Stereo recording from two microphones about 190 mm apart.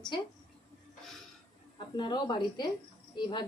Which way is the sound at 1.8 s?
25° left (ahead or behind).